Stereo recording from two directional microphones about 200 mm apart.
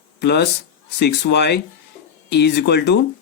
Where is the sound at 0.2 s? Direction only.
55° left (ahead or behind).